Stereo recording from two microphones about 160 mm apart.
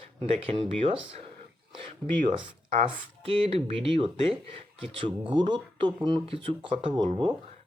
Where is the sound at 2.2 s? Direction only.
30° right (ahead or behind).